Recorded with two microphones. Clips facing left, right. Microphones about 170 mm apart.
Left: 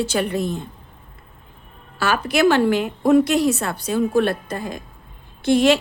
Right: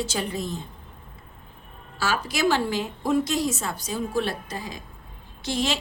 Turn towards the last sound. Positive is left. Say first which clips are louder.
# left 11 dB
turn(degrees=60)  # may be behind; listen again after turning